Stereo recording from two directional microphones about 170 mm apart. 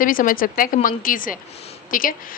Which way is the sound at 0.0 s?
55° left (ahead or behind).